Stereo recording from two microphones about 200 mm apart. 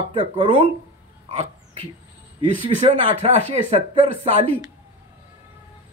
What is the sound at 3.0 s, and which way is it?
Speech, 25° right (ahead or behind).